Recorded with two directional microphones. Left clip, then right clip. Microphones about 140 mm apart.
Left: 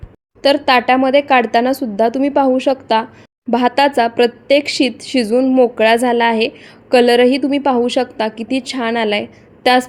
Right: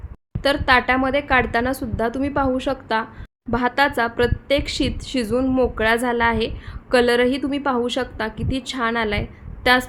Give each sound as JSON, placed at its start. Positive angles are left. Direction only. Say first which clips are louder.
{"t": 0.4, "sound": "speech", "louder": "left 5 dB", "side_deg": 20}